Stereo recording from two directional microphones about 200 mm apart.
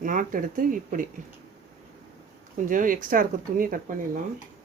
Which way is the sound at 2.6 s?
40° right (ahead or behind).